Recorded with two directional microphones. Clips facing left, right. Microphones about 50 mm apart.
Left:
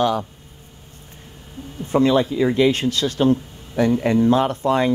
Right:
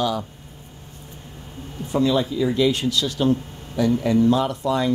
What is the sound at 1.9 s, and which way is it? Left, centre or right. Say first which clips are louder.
Speech: left 3 dB; left.